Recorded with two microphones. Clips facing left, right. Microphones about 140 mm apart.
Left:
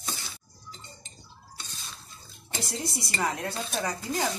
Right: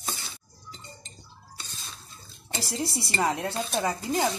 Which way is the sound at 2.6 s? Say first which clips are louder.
Right 4 dB; 30° right (ahead or behind).